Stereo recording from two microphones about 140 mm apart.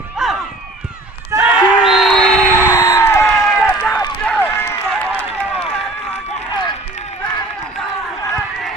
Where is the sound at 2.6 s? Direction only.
20° left (ahead or behind).